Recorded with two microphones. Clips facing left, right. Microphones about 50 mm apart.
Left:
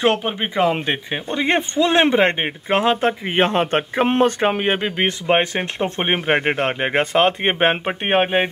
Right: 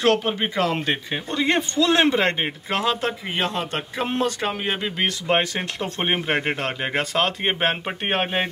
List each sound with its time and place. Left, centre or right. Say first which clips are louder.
0.0 s speech: left 1 dB; centre